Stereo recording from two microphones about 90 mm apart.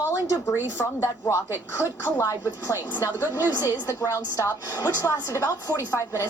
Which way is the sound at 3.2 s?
20° right (ahead or behind).